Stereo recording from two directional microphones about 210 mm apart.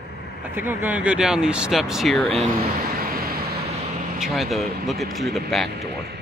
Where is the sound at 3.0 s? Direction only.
45° right (ahead or behind).